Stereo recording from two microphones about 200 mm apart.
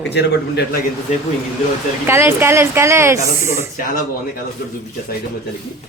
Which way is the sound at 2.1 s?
10° right (ahead or behind).